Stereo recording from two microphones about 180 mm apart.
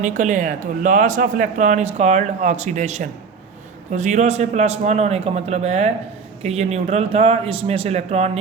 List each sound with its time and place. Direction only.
0.0 s a man's voice: 45° right (ahead or behind)